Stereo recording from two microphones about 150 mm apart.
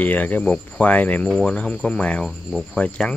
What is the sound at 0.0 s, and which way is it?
Speech, 10° left (ahead or behind).